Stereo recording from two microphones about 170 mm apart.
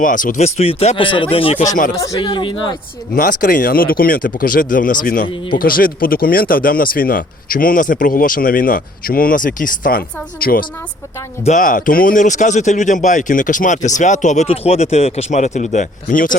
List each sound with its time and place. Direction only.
0.0 s speech: 50° left (ahead or behind); by 2.7 s 30° left (ahead or behind)
3.2 s speech: 55° left (ahead or behind)